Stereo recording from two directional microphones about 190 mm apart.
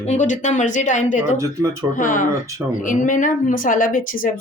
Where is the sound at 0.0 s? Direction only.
40° left (ahead or behind).